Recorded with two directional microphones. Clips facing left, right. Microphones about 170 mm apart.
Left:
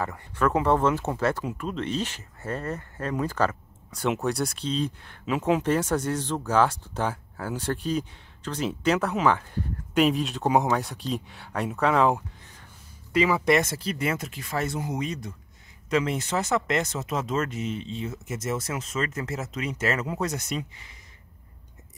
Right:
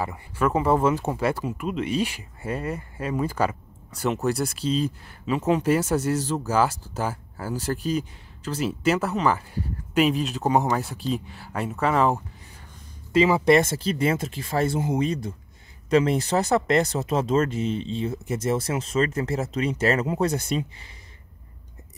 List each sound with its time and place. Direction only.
0.0 s speech: 10° right (ahead or behind)
13.1 s speech: 30° right (ahead or behind)